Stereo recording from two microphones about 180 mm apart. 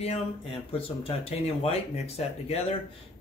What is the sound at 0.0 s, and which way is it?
Speech, 35° left (ahead or behind).